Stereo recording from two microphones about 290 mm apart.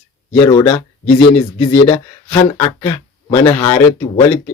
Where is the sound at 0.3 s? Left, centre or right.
Centre.